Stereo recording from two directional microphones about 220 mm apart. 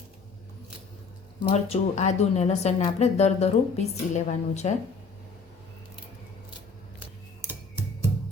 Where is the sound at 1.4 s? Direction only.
25° left (ahead or behind).